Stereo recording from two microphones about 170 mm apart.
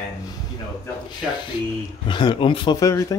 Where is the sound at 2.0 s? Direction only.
30° left (ahead or behind).